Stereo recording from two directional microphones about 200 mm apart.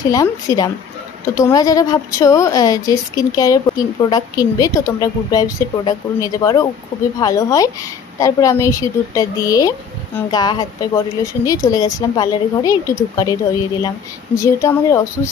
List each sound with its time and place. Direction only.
0.0 s a woman's voice: 15° left (ahead or behind)